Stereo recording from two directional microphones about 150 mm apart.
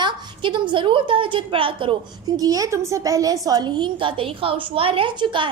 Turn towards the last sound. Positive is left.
turn(degrees=-30)  # may be behind; listen again after turning